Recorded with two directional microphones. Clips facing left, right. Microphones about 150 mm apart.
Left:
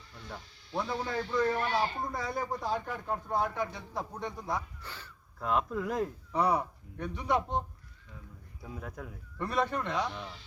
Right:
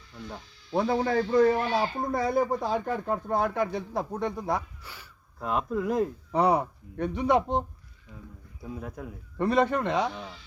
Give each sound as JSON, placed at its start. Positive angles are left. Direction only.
{"t": 0.7, "sound": "a man's voice", "side_deg": -55}
{"t": 4.8, "sound": "speech", "side_deg": -10}
{"t": 6.3, "sound": "speech", "side_deg": -80}
{"t": 9.4, "sound": "speech", "side_deg": -80}